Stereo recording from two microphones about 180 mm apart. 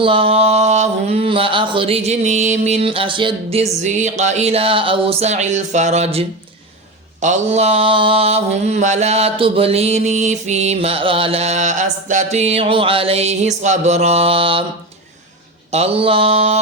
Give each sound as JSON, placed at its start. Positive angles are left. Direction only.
{"t": 0.0, "sound": "mantra", "side_deg": -30}
{"t": 15.7, "sound": "mantra", "side_deg": -35}